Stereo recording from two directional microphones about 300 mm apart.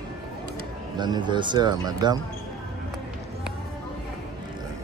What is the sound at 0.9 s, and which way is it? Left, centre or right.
Speech, centre.